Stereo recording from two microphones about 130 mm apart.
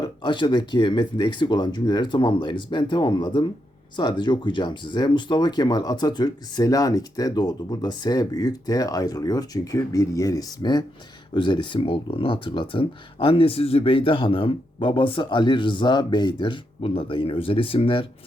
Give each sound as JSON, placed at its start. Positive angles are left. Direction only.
{"t": 0.0, "sound": "speech", "side_deg": 35}